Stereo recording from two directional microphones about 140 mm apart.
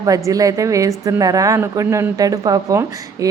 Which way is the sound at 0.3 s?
25° right (ahead or behind).